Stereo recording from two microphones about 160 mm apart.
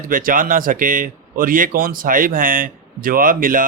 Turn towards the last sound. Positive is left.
turn(degrees=-60)  # may be behind; listen again after turning